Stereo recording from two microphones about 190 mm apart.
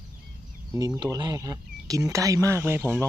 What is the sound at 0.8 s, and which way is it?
Speech, 20° right (ahead or behind).